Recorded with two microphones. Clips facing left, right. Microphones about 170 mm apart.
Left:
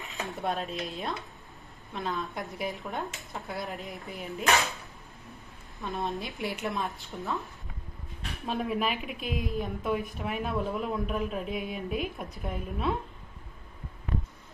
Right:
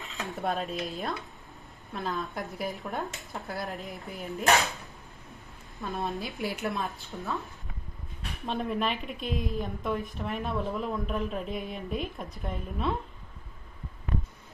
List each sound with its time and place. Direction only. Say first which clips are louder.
0.0 s dishes: left 1 dB; 20° left (ahead or behind)
0.3 s a woman's voice: right 2 dB; centre (ahead or behind)
5.8 s a woman's voice: even; centre (ahead or behind)
8.5 s a woman's voice: even; 5° left (ahead or behind)